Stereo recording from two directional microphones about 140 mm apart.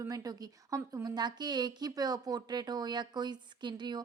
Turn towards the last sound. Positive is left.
turn(degrees=-30)  # may be behind; listen again after turning